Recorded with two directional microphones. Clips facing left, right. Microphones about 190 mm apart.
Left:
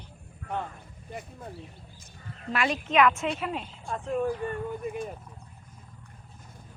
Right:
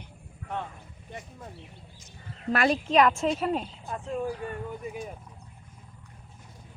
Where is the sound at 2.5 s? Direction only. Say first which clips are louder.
Right 2 dB; 35° right (ahead or behind).